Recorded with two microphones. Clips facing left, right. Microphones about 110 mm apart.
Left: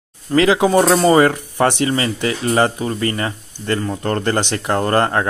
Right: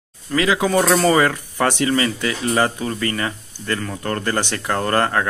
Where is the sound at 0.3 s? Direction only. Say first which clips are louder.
Left 5 dB; 30° left (ahead or behind).